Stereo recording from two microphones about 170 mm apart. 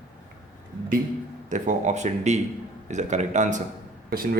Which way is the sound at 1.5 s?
45° right (ahead or behind).